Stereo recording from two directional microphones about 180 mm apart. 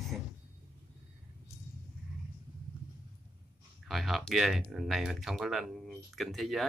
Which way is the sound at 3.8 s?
Centre (ahead or behind).